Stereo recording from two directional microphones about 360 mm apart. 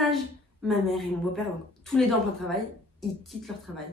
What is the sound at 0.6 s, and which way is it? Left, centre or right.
A woman's voice, centre.